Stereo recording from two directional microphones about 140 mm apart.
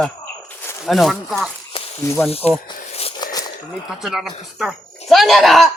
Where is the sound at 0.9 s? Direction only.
Centre (ahead or behind).